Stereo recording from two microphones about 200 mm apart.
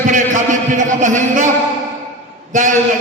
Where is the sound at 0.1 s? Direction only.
40° right (ahead or behind).